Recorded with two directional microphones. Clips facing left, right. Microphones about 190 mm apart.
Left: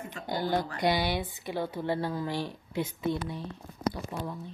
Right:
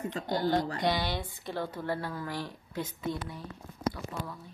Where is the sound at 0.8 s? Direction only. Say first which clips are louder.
Left 3 dB; 10° left (ahead or behind).